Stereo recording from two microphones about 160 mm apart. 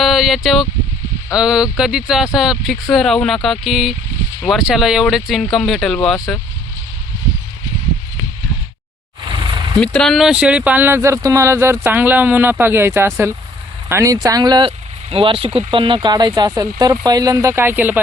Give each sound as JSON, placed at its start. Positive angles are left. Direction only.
{"t": 0.0, "sound": "a sound", "side_deg": 0}
{"t": 1.4, "sound": "speech", "side_deg": -5}
{"t": 9.8, "sound": "speech", "side_deg": 5}